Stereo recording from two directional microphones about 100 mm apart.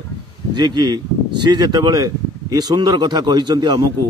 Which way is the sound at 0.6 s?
45° right (ahead or behind).